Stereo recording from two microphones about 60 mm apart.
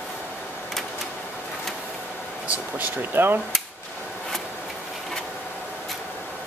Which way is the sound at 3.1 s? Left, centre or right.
Right.